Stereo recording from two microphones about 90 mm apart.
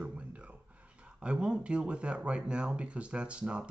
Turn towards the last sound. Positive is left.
turn(degrees=-10)  # may be behind; listen again after turning